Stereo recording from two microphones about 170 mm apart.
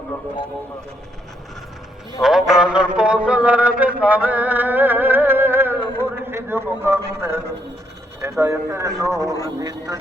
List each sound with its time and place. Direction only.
2.5 s a man's voice: 5° right (ahead or behind)